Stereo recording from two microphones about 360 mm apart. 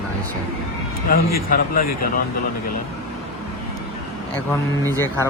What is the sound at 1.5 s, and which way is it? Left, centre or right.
Speech, left.